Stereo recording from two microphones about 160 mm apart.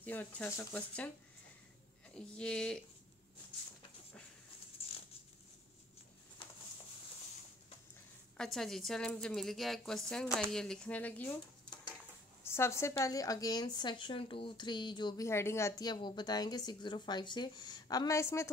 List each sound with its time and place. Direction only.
0.0 s speech: 10° left (ahead or behind)
2.1 s a woman's voice: 5° left (ahead or behind)
4.8 s a sound: 40° left (ahead or behind)
8.4 s a woman's voice: 5° left (ahead or behind)
12.4 s a woman's voice: 15° left (ahead or behind)
15.2 s a woman's voice: 15° left (ahead or behind)